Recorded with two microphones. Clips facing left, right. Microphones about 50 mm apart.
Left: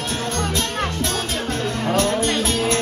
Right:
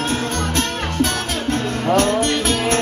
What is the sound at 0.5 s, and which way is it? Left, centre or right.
Music, right.